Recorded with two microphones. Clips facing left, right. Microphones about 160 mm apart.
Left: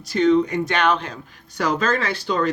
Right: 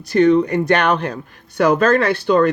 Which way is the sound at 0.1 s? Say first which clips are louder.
Right 4 dB; 60° right (ahead or behind).